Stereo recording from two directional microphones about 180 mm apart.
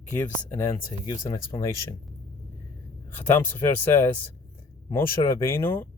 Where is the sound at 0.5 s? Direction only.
15° left (ahead or behind).